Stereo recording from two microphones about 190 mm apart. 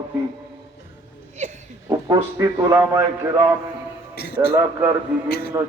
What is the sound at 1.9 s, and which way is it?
A man's voice, 15° right (ahead or behind).